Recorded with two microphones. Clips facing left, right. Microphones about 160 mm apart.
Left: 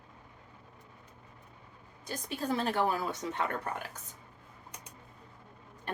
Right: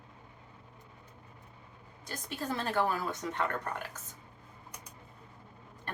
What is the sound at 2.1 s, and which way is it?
Speech, 15° left (ahead or behind).